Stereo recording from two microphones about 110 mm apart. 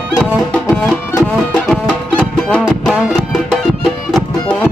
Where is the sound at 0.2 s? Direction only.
10° left (ahead or behind).